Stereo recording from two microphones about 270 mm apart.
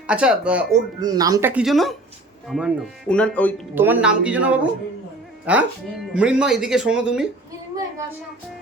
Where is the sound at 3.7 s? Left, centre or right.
Centre.